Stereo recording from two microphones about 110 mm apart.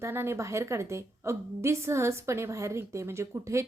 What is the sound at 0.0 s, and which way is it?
A woman's voice, 20° right (ahead or behind).